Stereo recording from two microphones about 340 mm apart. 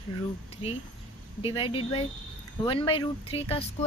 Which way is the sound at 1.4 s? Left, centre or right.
Centre.